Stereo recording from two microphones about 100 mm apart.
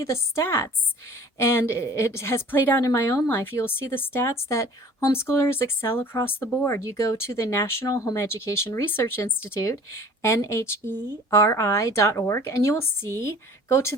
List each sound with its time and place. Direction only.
0.0 s speech: 30° left (ahead or behind)
6.7 s speech: 30° left (ahead or behind)